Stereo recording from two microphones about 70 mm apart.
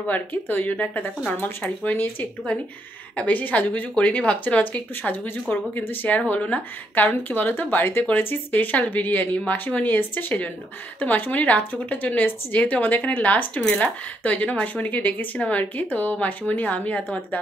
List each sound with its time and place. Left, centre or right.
0.0 s speech: left